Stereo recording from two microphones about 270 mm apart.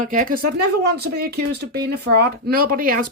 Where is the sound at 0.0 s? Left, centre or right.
Right.